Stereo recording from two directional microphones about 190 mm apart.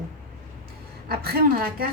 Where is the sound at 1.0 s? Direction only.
55° right (ahead or behind).